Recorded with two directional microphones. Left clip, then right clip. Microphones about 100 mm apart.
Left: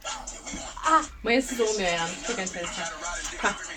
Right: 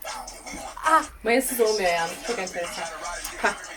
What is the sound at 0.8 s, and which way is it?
Speech, 25° right (ahead or behind).